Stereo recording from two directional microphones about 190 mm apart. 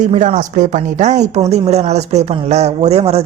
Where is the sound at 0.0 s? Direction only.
40° right (ahead or behind).